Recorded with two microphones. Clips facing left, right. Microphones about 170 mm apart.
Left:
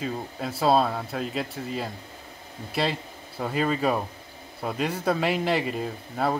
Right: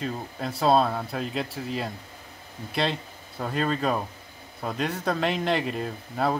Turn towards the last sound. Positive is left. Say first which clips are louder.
# even
turn(degrees=0)  # may be behind; listen again after turning